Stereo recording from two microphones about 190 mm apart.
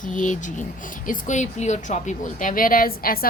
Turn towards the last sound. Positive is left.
turn(degrees=50)  # may be behind; listen again after turning